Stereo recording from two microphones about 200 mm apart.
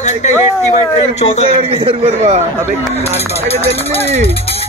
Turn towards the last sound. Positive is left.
turn(degrees=-35)  # may be behind; listen again after turning